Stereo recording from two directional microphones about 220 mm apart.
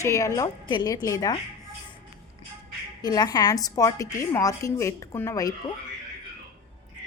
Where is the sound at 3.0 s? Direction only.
20° left (ahead or behind).